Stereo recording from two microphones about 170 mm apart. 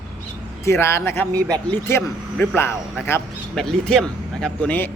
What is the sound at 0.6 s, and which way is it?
Speech, 15° left (ahead or behind).